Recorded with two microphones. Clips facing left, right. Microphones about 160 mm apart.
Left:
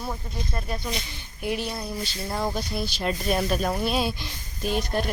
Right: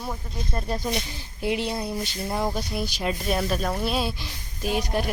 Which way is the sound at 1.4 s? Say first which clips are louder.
Right 3 dB; 20° right (ahead or behind).